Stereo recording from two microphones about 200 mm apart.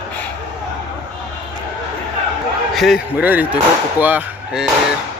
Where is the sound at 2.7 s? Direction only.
Centre (ahead or behind).